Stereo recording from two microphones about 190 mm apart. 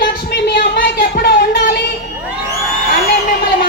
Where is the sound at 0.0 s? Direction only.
55° left (ahead or behind).